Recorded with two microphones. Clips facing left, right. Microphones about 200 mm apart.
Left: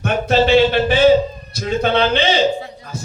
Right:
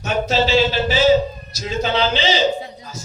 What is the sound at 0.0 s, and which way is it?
A man's voice, 55° left (ahead or behind).